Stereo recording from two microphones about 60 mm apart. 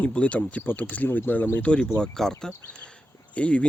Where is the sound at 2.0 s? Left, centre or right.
Centre.